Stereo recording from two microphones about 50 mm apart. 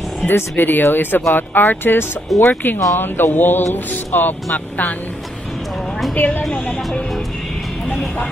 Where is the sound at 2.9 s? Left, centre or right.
Left.